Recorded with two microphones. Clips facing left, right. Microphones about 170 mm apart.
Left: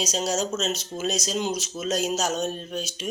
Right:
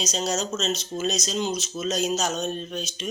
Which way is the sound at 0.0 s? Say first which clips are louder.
Left 1 dB; 10° left (ahead or behind).